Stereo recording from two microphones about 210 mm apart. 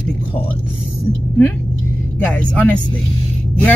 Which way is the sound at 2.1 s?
10° left (ahead or behind).